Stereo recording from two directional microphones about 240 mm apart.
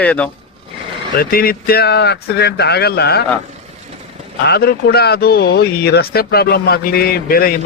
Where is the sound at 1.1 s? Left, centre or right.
Left.